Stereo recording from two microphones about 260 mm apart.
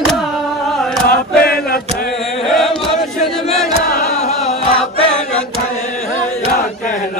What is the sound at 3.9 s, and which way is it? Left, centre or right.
Music, left.